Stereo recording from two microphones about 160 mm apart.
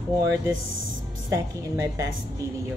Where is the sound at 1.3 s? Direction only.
20° right (ahead or behind).